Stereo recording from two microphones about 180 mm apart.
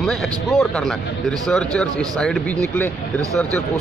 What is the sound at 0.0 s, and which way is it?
A man's voice, centre (ahead or behind).